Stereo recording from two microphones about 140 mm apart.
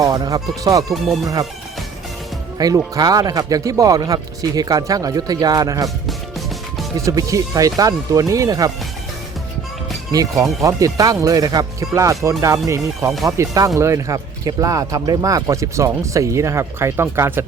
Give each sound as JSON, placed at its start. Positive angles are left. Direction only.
{"t": 0.0, "sound": "speech", "side_deg": -25}
{"t": 0.9, "sound": "speech", "side_deg": 0}
{"t": 1.2, "sound": "speech", "side_deg": -25}
{"t": 2.6, "sound": "speech", "side_deg": -25}
{"t": 6.9, "sound": "speech", "side_deg": -25}
{"t": 10.1, "sound": "speech", "side_deg": -25}